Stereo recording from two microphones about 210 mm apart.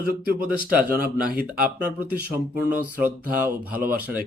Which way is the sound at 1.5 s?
5° right (ahead or behind).